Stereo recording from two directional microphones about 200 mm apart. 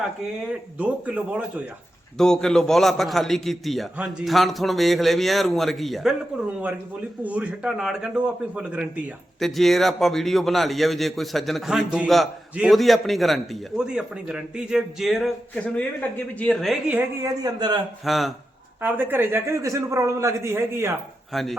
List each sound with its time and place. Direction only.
0.8 s a man's voice: 5° right (ahead or behind)
7.2 s a man's voice: 5° right (ahead or behind)
17.2 s a man's voice: 15° right (ahead or behind)
18.0 s a man's voice: centre (ahead or behind)
21.3 s a man's voice: centre (ahead or behind)